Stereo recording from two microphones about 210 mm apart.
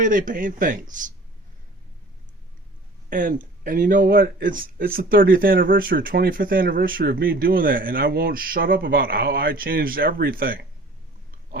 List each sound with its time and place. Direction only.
0.0 s speech: 40° right (ahead or behind)
3.1 s speech: 40° right (ahead or behind)